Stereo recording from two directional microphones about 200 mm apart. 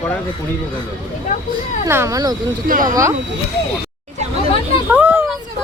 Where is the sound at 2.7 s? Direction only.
40° right (ahead or behind).